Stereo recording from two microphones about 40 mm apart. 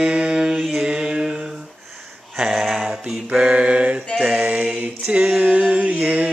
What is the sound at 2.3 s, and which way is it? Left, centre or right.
Mantra, centre.